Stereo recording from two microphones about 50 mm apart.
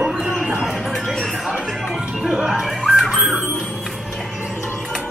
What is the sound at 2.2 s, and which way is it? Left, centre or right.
Music, centre.